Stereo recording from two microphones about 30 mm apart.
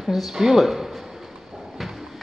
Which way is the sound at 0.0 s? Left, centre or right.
Centre.